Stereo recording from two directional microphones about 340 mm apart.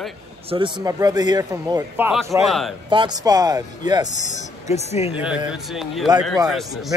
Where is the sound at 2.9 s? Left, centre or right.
Centre.